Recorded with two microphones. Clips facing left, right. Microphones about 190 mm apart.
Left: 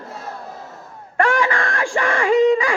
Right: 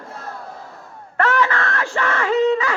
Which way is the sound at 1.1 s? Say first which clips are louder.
Left 1 dB; 15° left (ahead or behind).